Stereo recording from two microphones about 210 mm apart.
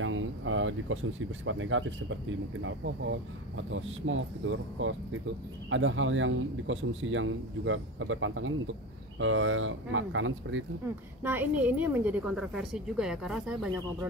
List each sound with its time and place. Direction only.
0.0 s a sound: 70° right (ahead or behind)
1.4 s a man's voice: 70° right (ahead or behind)
11.2 s a woman's voice: 10° right (ahead or behind)